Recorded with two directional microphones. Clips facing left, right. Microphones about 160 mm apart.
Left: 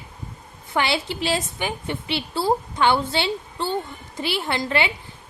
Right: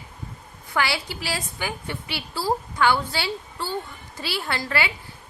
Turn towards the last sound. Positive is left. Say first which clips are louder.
# left 3 dB
turn(degrees=20)  # may be behind; listen again after turning